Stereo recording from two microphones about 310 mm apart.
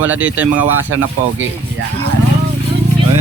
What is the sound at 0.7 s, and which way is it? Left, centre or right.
Speech, right.